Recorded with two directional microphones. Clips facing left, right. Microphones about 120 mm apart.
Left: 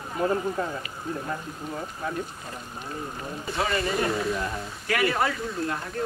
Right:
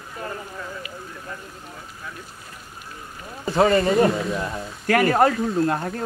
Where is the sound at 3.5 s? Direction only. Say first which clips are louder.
Right 10 dB; 35° right (ahead or behind).